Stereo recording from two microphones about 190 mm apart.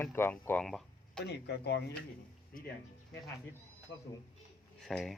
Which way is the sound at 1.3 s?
60° left (ahead or behind).